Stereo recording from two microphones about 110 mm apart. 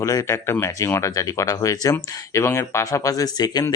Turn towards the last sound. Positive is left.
turn(degrees=35)  # may be behind; listen again after turning